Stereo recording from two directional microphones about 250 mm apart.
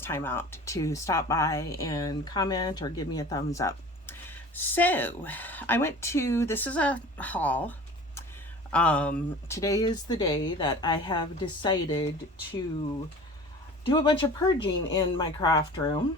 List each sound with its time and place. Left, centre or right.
0.0 s speech: centre
13.8 s speech: centre